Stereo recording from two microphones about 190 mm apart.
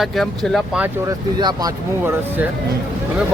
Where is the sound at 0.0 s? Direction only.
Centre (ahead or behind).